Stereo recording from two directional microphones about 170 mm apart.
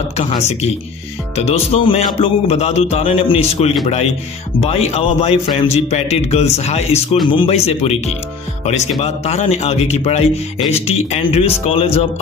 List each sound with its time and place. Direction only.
0.2 s a man's voice: 35° left (ahead or behind)